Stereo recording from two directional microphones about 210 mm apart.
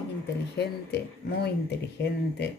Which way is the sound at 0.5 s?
50° left (ahead or behind).